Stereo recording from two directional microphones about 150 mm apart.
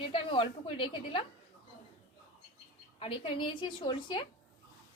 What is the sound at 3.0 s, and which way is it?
A woman's voice, 35° left (ahead or behind).